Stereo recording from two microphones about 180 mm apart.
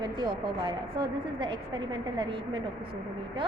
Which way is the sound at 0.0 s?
25° right (ahead or behind).